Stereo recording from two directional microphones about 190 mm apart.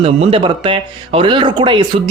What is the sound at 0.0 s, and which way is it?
Speech, 30° right (ahead or behind).